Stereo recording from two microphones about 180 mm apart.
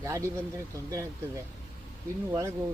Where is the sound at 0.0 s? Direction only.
20° right (ahead or behind).